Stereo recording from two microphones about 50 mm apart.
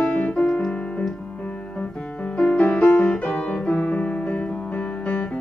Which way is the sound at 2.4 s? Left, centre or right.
Centre.